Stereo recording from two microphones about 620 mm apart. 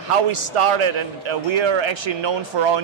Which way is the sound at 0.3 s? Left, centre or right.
Right.